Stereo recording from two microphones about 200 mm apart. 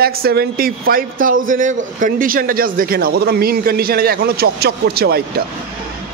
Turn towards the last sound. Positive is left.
turn(degrees=-50)  # may be behind; listen again after turning